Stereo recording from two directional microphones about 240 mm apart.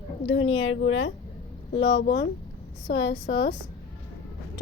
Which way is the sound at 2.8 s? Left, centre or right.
Left.